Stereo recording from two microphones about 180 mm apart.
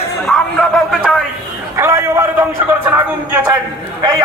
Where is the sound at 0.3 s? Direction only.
Centre (ahead or behind).